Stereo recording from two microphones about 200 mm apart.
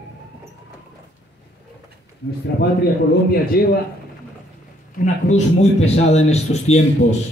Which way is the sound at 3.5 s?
50° left (ahead or behind).